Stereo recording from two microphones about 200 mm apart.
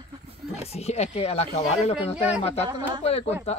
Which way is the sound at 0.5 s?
35° left (ahead or behind).